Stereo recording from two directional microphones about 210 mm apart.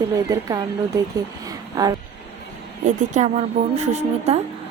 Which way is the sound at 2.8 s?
35° right (ahead or behind).